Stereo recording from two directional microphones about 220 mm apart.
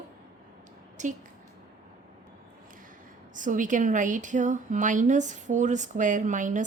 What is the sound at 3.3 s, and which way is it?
Speech, 35° right (ahead or behind).